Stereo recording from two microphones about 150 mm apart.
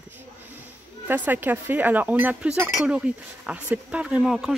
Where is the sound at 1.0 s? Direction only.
10° right (ahead or behind).